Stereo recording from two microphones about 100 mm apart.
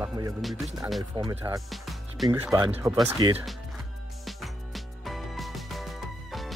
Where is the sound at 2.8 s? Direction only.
25° right (ahead or behind).